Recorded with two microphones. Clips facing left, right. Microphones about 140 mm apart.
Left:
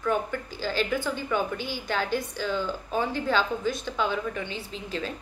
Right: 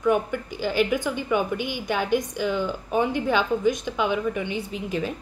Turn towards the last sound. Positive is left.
turn(degrees=-15)  # may be behind; listen again after turning